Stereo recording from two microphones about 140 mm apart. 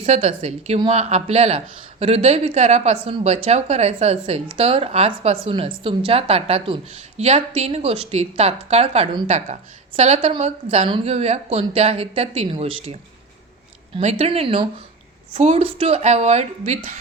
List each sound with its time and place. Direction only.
0.0 s speech: 50° right (ahead or behind)
14.0 s speech: 50° right (ahead or behind)